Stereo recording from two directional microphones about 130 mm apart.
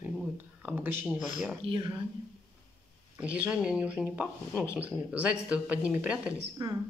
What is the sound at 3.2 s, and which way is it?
Speech, 10° right (ahead or behind).